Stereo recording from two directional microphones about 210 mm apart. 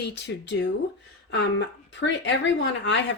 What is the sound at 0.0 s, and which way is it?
Speech, 55° left (ahead or behind).